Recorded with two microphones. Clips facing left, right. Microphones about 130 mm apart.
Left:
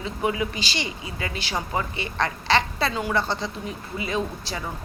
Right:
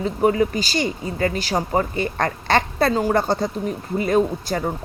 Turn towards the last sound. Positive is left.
turn(degrees=-50)  # may be behind; listen again after turning